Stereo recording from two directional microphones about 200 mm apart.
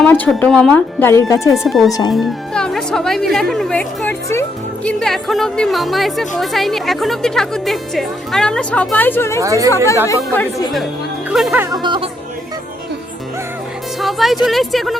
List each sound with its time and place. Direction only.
0.0 s speech: 5° left (ahead or behind)
1.5 s speech: centre (ahead or behind)
1.9 s speech: 20° left (ahead or behind)
2.1 s speech: 5° left (ahead or behind)
9.4 s speech: 15° right (ahead or behind)
9.7 s speech: 15° left (ahead or behind)
11.3 s speech: 5° right (ahead or behind)
11.6 s music: 20° right (ahead or behind)
14.0 s music: centre (ahead or behind)
14.4 s speech: centre (ahead or behind)